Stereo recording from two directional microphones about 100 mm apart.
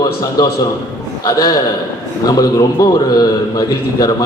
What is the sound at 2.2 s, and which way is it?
A man's voice, 35° left (ahead or behind).